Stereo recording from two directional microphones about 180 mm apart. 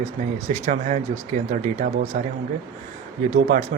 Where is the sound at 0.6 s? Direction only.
45° right (ahead or behind).